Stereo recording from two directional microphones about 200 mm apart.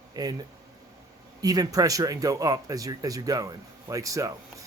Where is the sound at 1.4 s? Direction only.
20° right (ahead or behind).